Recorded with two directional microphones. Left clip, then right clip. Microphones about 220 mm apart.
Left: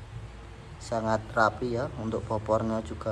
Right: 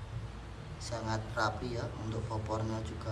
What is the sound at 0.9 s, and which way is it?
Speech, centre (ahead or behind).